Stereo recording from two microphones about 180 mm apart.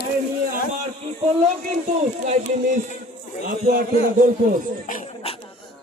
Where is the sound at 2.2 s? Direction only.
40° right (ahead or behind).